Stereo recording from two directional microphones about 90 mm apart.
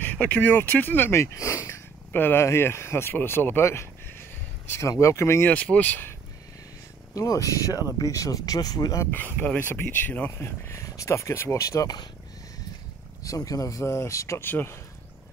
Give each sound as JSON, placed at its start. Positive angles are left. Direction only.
{"t": 0.0, "sound": "speech", "side_deg": 15}
{"t": 2.1, "sound": "speech", "side_deg": 20}
{"t": 5.5, "sound": "speech", "side_deg": 15}
{"t": 7.2, "sound": "speech", "side_deg": 40}
{"t": 9.1, "sound": "speech", "side_deg": 20}
{"t": 13.2, "sound": "speech", "side_deg": 40}